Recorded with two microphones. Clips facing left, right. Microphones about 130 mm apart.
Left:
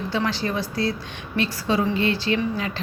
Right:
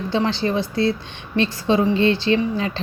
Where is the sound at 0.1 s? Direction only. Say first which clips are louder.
Right 5 dB; 25° right (ahead or behind).